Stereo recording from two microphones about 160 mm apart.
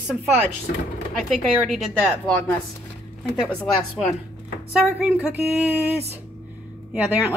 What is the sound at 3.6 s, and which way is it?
A woman's voice, centre (ahead or behind).